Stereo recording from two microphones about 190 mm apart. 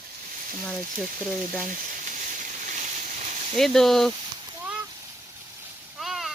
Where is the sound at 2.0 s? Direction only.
40° right (ahead or behind).